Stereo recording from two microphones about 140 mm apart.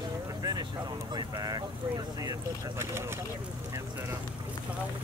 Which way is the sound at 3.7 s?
20° right (ahead or behind).